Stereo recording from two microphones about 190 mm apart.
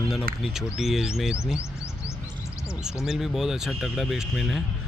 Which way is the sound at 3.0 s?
Centre (ahead or behind).